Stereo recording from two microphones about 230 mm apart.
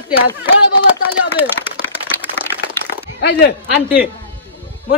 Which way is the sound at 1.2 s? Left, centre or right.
Left.